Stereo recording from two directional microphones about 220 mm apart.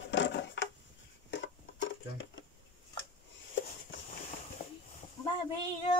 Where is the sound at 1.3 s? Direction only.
55° left (ahead or behind).